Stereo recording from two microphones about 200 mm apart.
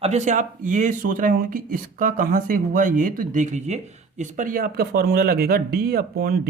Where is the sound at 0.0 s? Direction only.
35° right (ahead or behind).